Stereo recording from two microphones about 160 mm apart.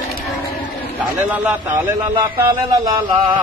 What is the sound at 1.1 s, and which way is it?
Speech, 10° right (ahead or behind).